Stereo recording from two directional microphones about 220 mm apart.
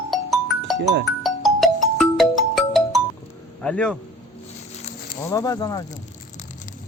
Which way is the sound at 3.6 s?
5° left (ahead or behind).